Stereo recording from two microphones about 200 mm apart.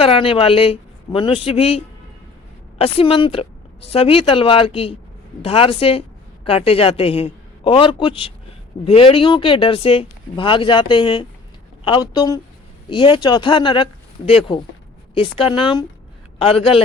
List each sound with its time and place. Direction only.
0.0 s a woman's voice: 25° left (ahead or behind)